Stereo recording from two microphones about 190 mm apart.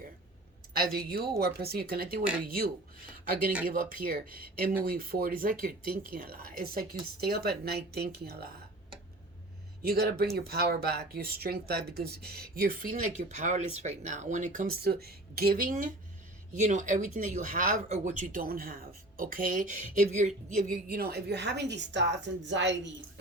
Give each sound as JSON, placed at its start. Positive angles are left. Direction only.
{"t": 0.7, "sound": "a woman's voice", "side_deg": -55}
{"t": 3.7, "sound": "a woman's voice", "side_deg": -45}
{"t": 9.8, "sound": "a woman's voice", "side_deg": -55}
{"t": 20.8, "sound": "a woman's voice", "side_deg": -55}